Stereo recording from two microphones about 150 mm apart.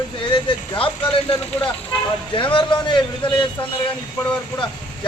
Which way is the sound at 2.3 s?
35° left (ahead or behind).